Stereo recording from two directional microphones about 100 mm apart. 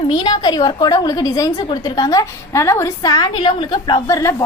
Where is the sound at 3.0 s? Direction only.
40° left (ahead or behind).